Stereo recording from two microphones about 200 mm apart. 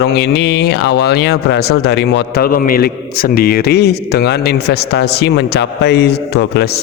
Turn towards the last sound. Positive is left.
turn(degrees=55)  # may be behind; listen again after turning